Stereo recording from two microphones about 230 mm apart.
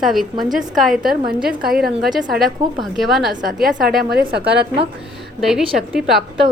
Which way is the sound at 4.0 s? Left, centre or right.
Right.